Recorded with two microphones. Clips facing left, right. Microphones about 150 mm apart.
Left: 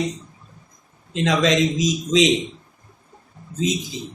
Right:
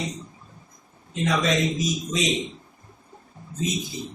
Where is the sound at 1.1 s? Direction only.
90° left.